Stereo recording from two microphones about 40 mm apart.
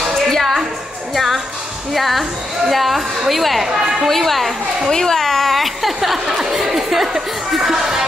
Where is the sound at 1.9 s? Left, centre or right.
Centre.